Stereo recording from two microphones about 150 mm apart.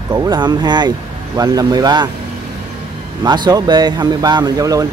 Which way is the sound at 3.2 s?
25° right (ahead or behind).